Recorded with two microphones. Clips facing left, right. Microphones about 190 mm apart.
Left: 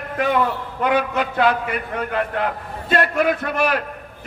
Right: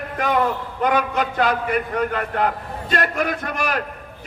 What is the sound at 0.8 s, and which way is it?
A man's voice, 45° right (ahead or behind).